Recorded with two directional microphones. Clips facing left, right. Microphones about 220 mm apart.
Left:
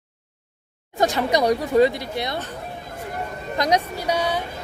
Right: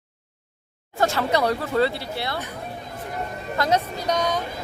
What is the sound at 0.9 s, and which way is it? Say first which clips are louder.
Speech: left 2 dB; 15° left (ahead or behind).